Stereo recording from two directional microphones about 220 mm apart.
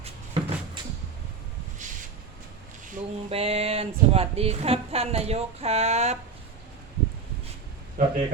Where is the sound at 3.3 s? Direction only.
25° right (ahead or behind).